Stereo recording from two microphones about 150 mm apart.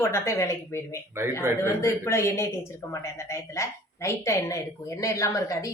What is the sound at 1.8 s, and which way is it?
A woman's voice, 20° left (ahead or behind).